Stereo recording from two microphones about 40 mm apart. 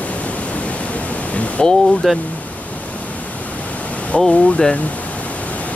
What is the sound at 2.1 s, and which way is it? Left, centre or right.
Speech, centre.